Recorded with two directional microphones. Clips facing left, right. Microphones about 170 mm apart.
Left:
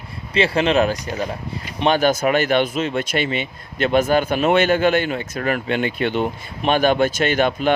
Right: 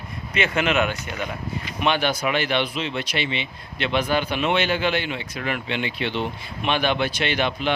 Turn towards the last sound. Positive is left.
turn(degrees=45)  # may be behind; listen again after turning